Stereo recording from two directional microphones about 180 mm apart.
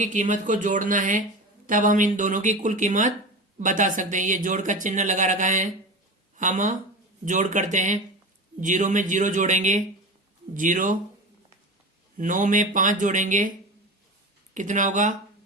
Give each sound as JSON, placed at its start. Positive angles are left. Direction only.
{"t": 0.0, "sound": "speech", "side_deg": -45}
{"t": 12.1, "sound": "speech", "side_deg": -45}
{"t": 14.5, "sound": "speech", "side_deg": -45}